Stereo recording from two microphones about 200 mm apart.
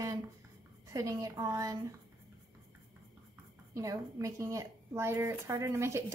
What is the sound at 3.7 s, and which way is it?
A woman's voice, 15° right (ahead or behind).